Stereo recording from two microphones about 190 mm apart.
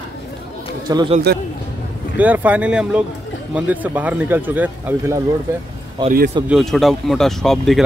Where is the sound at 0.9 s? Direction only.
20° right (ahead or behind).